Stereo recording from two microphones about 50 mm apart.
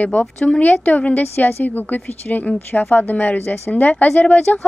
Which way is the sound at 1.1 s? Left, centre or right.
Left.